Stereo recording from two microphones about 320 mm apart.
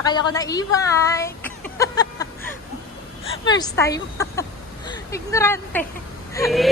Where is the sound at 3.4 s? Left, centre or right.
Centre.